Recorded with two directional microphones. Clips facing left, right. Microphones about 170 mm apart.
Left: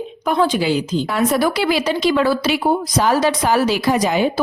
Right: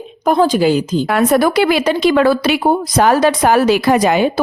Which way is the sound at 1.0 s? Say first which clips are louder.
Right 5 dB; 60° right (ahead or behind).